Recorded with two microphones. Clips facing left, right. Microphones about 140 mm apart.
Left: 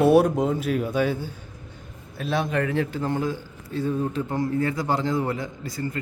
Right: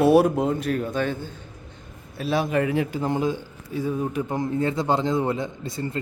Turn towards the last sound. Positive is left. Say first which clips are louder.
# right 1 dB
turn(degrees=-25)  # may be behind; listen again after turning